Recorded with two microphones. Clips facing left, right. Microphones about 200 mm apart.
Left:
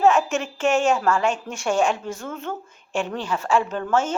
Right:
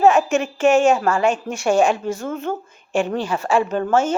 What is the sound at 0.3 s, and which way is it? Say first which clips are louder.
A woman's voice: right 6 dB; 10° right (ahead or behind).